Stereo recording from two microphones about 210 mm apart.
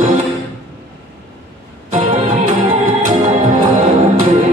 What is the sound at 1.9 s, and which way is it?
Music, 35° right (ahead or behind).